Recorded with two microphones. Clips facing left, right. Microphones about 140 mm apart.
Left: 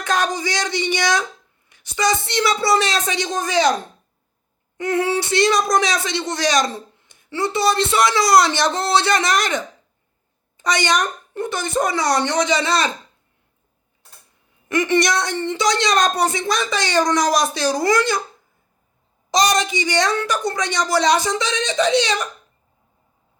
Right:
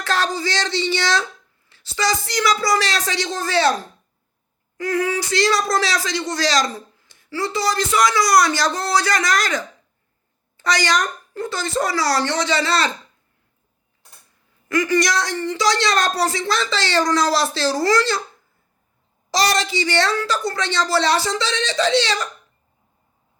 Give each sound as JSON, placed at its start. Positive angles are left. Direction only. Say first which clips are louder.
{"t": 0.0, "sound": "speech", "louder": "left 1 dB", "side_deg": 20}
{"t": 4.8, "sound": "speech", "louder": "left 2 dB", "side_deg": 25}
{"t": 14.7, "sound": "speech", "louder": "left 1 dB", "side_deg": 25}
{"t": 19.3, "sound": "speech", "louder": "left 2 dB", "side_deg": 20}